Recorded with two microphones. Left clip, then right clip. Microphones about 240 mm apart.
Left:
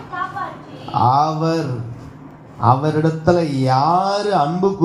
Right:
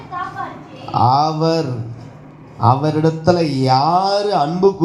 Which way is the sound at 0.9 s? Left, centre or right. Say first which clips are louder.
Right 1 dB; right.